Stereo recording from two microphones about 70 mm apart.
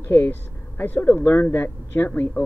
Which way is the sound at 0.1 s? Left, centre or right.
Left.